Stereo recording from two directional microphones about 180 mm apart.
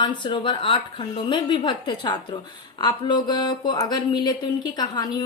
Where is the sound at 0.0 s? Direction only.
25° left (ahead or behind).